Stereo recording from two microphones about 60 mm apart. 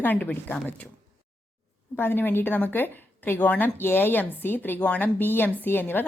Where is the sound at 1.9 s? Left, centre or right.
Left.